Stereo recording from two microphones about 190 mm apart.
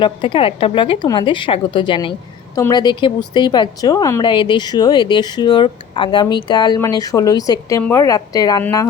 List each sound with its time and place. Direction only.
0.0 s a woman's voice: 25° left (ahead or behind)